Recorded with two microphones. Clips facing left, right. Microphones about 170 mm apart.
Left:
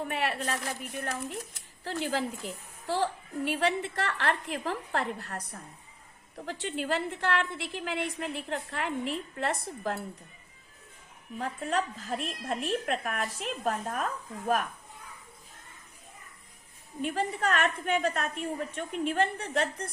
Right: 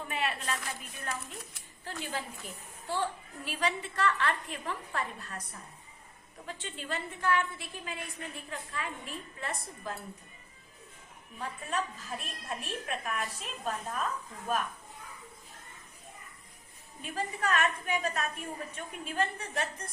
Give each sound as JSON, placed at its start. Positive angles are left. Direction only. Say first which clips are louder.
{"t": 0.0, "sound": "a woman's voice", "louder": "left 4 dB", "side_deg": 65}
{"t": 1.8, "sound": "a woman's voice", "louder": "left 7 dB", "side_deg": 80}
{"t": 6.4, "sound": "a woman's voice", "louder": "left 8 dB", "side_deg": 70}
{"t": 11.3, "sound": "speech", "louder": "left 5 dB", "side_deg": 70}
{"t": 17.0, "sound": "speech", "louder": "left 5 dB", "side_deg": 65}